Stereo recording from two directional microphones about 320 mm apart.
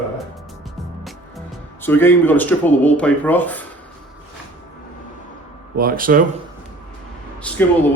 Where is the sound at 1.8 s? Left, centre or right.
Centre.